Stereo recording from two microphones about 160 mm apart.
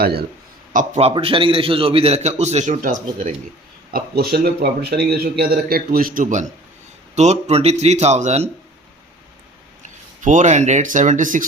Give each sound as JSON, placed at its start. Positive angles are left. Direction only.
{"t": 0.0, "sound": "a man's voice", "side_deg": -85}
{"t": 0.7, "sound": "a man's voice", "side_deg": -45}
{"t": 3.9, "sound": "a man's voice", "side_deg": -80}
{"t": 7.2, "sound": "speech", "side_deg": -45}
{"t": 9.8, "sound": "speech", "side_deg": -50}